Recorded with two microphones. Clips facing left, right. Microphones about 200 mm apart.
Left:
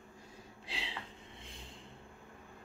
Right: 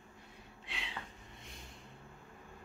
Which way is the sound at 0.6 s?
30° left (ahead or behind).